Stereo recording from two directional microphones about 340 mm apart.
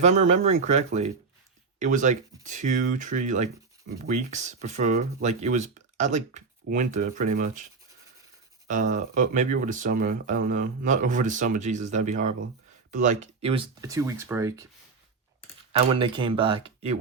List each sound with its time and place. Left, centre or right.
0.0 s speech: right
15.9 s speech: centre